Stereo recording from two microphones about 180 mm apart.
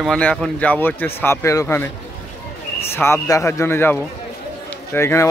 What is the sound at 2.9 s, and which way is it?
Speech, 15° left (ahead or behind).